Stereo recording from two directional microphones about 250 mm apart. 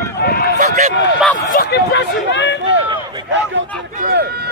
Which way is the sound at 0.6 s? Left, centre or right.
Right.